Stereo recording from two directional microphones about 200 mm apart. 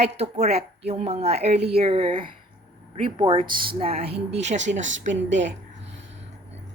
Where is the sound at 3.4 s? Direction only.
45° right (ahead or behind).